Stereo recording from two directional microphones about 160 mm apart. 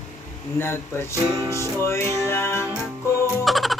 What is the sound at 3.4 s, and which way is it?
Music, centre (ahead or behind).